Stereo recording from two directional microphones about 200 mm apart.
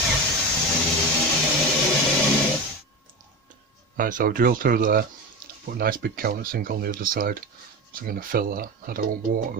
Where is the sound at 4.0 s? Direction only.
40° right (ahead or behind).